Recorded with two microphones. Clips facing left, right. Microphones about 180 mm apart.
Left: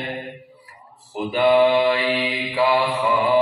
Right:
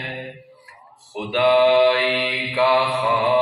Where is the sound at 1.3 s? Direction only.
80° right.